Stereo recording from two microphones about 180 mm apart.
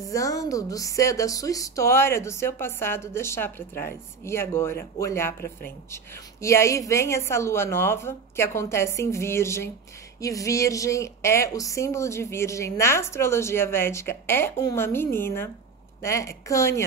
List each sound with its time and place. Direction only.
0.1 s a woman's voice: 20° left (ahead or behind)
6.4 s a woman's voice: 15° left (ahead or behind)